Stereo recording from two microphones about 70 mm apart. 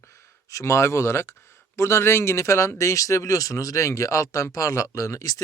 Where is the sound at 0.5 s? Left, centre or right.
Left.